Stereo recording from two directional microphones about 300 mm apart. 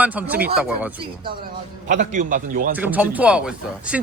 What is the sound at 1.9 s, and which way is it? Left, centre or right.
Speech, right.